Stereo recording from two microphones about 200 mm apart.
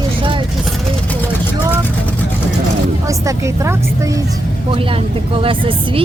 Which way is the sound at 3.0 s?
15° right (ahead or behind).